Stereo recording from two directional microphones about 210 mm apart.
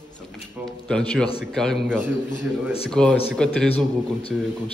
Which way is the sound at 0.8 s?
5° left (ahead or behind).